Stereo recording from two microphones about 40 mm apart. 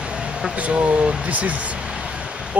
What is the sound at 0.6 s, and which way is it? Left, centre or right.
Speech, right.